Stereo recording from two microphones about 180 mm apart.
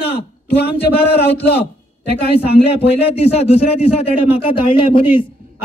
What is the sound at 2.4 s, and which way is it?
A man's voice, 35° left (ahead or behind).